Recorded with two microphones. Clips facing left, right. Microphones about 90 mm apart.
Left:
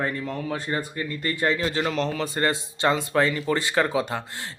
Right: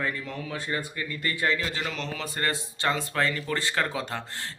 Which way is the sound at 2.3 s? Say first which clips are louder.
Left 5 dB; 25° left (ahead or behind).